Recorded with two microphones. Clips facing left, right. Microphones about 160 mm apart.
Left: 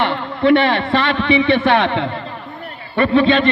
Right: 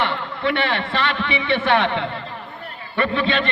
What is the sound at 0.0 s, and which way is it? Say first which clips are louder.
A man's voice: left 6 dB; 40° left (ahead or behind).